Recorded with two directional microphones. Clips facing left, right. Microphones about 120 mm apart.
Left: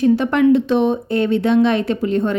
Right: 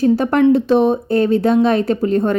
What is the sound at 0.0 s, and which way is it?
A woman's voice, 40° right (ahead or behind).